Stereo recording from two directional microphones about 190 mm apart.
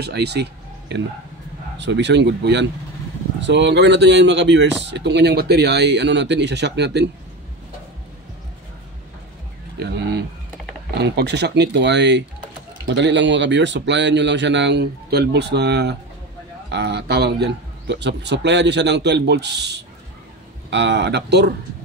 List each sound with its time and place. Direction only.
0.0 s speech: 60° right (ahead or behind)
9.8 s a sound: 60° right (ahead or behind)
11.0 s speech: 60° right (ahead or behind)